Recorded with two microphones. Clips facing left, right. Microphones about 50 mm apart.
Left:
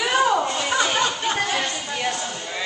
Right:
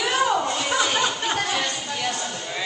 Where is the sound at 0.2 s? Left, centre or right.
Centre.